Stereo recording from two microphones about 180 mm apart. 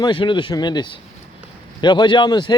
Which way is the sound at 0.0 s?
25° left (ahead or behind).